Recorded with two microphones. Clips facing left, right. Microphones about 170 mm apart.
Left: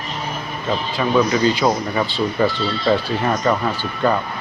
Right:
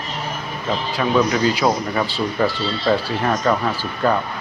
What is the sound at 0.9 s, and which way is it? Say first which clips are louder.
Speech: left 1 dB; centre (ahead or behind).